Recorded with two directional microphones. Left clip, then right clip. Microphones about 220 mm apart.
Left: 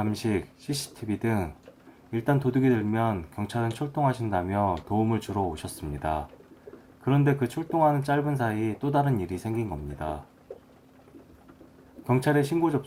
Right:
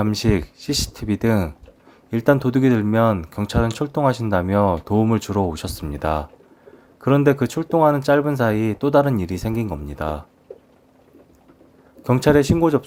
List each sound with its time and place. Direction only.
0.0 s speech: 45° right (ahead or behind)
12.0 s speech: 45° right (ahead or behind)